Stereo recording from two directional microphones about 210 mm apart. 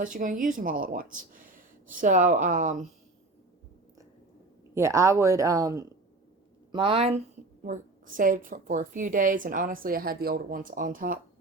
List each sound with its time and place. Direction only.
0.0 s a woman's voice: 40° right (ahead or behind)
4.7 s a woman's voice: 15° right (ahead or behind)
7.6 s a woman's voice: 40° right (ahead or behind)